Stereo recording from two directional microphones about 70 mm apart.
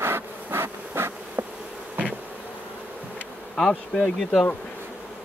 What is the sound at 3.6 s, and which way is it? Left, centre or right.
Speech, centre.